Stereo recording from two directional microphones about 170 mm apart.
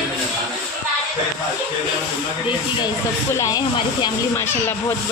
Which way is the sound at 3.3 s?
20° left (ahead or behind).